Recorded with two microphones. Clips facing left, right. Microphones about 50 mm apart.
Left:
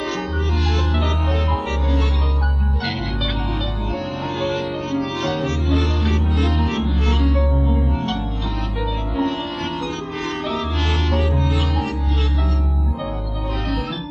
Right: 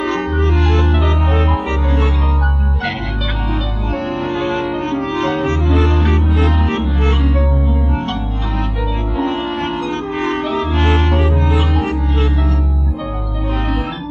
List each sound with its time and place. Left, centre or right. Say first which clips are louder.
0.0 s music: right 6 dB; right
4.2 s music: right 4 dB; right
9.1 s music: right 4 dB; right